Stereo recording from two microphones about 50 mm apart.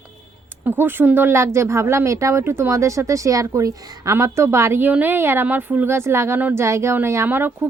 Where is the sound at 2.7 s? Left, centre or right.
Right.